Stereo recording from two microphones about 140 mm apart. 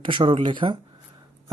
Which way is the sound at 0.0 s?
35° right (ahead or behind).